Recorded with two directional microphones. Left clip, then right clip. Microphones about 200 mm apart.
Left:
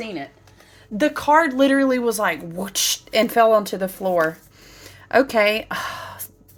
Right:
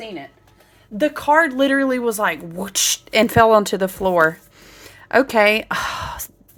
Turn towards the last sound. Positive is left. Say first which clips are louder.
# right 5 dB
turn(degrees=-20)  # may be behind; listen again after turning